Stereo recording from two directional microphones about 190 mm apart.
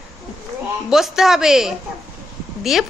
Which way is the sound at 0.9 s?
Centre (ahead or behind).